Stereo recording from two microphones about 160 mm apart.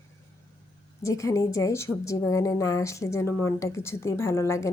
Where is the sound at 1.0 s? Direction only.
20° left (ahead or behind).